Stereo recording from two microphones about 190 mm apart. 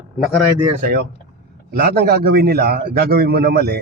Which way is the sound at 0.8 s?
55° right (ahead or behind).